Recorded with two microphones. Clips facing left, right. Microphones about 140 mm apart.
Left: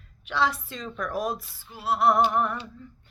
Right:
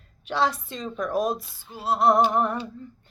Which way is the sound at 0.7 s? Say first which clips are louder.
Right 3 dB; 15° right (ahead or behind).